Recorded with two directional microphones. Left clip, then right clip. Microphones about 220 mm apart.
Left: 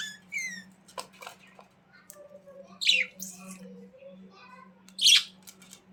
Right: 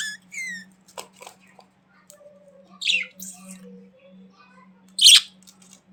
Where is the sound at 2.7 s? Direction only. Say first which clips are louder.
Right 2 dB; 10° left (ahead or behind).